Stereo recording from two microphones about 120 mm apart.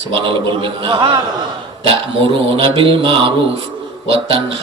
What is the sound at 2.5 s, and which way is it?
Speech, 45° right (ahead or behind).